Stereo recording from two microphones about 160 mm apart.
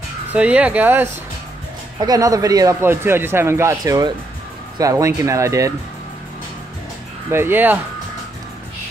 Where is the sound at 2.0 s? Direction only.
25° right (ahead or behind).